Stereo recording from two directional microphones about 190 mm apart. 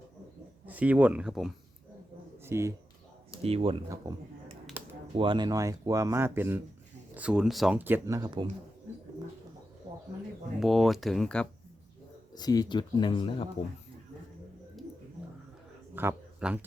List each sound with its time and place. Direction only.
0.6 s speech: 10° right (ahead or behind)
2.4 s speech: 15° right (ahead or behind)
3.4 s speech: 30° right (ahead or behind)
4.1 s speech: 20° right (ahead or behind)
4.8 s a sound: 10° right (ahead or behind)
5.1 s speech: 25° right (ahead or behind)
9.9 s bird: 20° right (ahead or behind)
10.6 s speech: centre (ahead or behind)
12.3 s speech: 20° left (ahead or behind)
16.0 s speech: 10° right (ahead or behind)